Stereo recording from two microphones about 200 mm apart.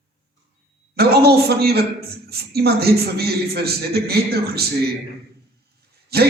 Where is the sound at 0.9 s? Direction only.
50° right (ahead or behind).